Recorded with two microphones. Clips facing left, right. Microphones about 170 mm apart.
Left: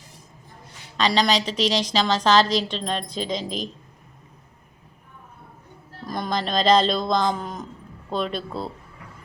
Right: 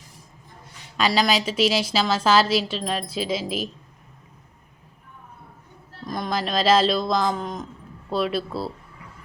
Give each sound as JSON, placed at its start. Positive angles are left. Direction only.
{"t": 0.9, "sound": "a woman's voice", "side_deg": -10}
{"t": 6.1, "sound": "speech", "side_deg": 0}